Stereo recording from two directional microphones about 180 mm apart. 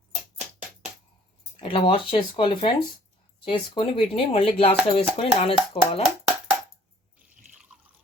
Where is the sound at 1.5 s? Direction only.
30° left (ahead or behind).